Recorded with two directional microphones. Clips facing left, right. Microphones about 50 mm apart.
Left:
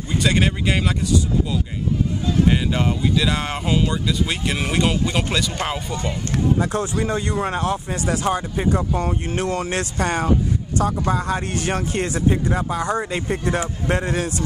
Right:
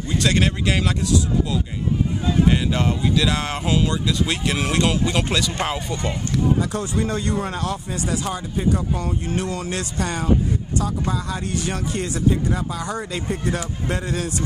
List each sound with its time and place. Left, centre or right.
0.1 s speech: centre
6.6 s speech: left
7.0 s speech: left